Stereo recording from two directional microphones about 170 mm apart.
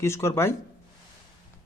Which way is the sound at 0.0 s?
15° left (ahead or behind).